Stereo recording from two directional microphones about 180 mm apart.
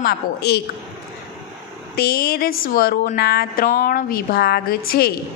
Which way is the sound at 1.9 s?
60° left (ahead or behind).